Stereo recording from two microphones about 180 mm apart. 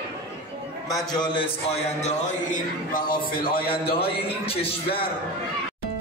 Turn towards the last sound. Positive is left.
turn(degrees=30)  # may be behind; listen again after turning